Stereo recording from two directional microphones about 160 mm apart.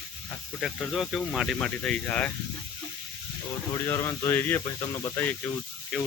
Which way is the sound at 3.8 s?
15° left (ahead or behind).